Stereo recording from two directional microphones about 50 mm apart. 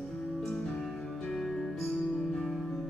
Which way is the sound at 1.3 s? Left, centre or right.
Centre.